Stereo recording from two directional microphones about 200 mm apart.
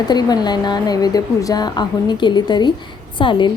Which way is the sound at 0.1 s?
20° left (ahead or behind).